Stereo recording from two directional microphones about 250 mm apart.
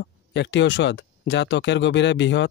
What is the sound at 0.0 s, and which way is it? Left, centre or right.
Speech, left.